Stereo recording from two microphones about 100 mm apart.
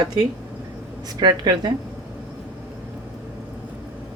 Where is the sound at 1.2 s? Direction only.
45° right (ahead or behind).